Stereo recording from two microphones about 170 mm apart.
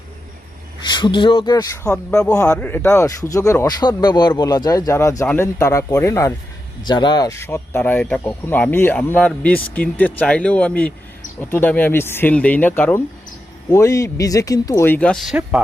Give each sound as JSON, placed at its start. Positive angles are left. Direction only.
{"t": 0.8, "sound": "speech", "side_deg": 25}
{"t": 2.3, "sound": "speech", "side_deg": 15}